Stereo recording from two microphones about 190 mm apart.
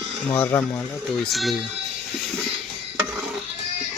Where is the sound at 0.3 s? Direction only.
10° left (ahead or behind).